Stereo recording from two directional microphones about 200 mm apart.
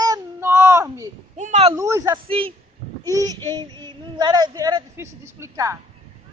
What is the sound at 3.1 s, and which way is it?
Speech, 15° right (ahead or behind).